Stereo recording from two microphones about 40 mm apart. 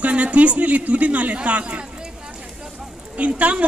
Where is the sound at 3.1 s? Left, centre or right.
Right.